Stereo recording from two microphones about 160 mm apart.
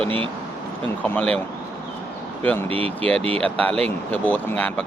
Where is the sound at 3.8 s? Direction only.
10° left (ahead or behind).